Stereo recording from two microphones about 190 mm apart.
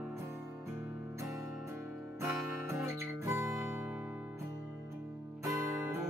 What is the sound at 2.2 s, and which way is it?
Music, 15° right (ahead or behind).